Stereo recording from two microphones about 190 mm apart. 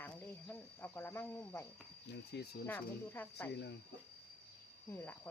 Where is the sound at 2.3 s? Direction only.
65° left (ahead or behind).